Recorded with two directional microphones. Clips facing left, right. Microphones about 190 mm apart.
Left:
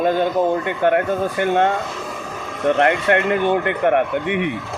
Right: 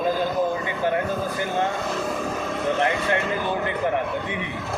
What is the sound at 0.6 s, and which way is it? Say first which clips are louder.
A man's voice: left 6 dB; 65° left (ahead or behind).